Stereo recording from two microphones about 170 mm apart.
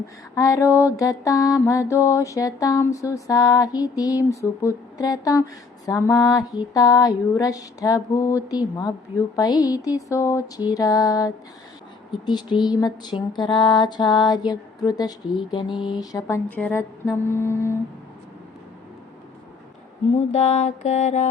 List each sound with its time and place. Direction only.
0.3 s speech: 20° left (ahead or behind)
16.6 s humming: 10° left (ahead or behind)
20.1 s mantra: 40° left (ahead or behind)